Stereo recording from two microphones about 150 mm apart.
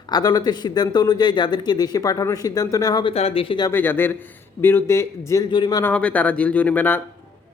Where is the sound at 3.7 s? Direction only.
15° left (ahead or behind).